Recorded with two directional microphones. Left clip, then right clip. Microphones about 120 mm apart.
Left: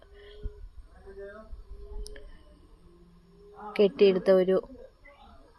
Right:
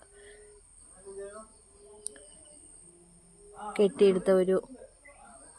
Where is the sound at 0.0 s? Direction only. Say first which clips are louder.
Left 2 dB; 20° right (ahead or behind).